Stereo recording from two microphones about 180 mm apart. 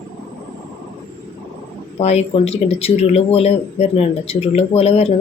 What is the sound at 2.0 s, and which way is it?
Speech, 35° left (ahead or behind).